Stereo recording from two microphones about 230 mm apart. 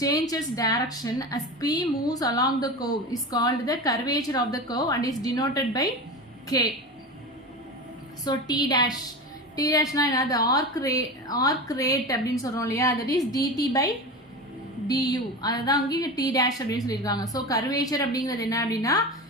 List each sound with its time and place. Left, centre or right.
0.0 s a woman's voice: centre
8.2 s a woman's voice: centre
14.8 s a woman's voice: centre